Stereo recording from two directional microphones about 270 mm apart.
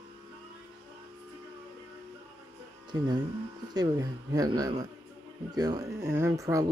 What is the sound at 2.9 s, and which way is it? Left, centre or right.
Speech, centre.